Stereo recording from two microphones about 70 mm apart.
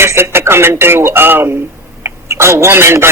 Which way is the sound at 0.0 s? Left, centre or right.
Right.